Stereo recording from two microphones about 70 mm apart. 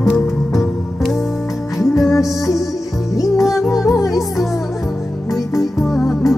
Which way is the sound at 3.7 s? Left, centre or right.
Left.